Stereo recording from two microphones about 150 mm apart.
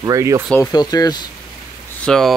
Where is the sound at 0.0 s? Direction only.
20° right (ahead or behind).